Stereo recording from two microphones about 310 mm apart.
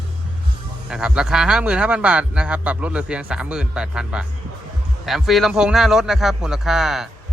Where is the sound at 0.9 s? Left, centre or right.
Centre.